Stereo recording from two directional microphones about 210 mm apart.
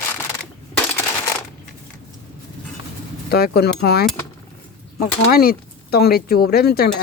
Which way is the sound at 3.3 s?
50° left (ahead or behind).